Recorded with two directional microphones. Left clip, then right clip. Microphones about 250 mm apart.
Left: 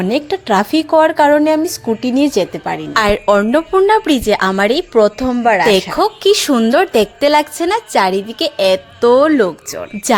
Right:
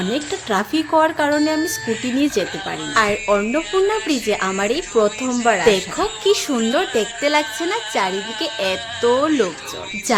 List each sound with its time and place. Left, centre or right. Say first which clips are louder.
0.1 s speech: left 7 dB; left
2.9 s a woman's voice: left 5 dB; left
5.6 s a woman's voice: left 5 dB; left